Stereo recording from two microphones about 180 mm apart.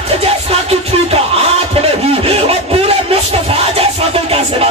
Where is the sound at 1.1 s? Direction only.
35° right (ahead or behind).